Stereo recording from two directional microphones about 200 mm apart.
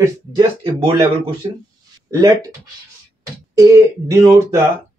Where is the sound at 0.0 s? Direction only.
20° right (ahead or behind).